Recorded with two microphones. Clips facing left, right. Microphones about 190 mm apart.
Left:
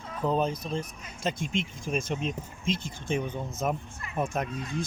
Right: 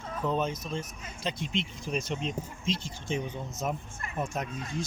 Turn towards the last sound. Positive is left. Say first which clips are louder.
# left 3 dB
turn(degrees=55)  # may be behind; listen again after turning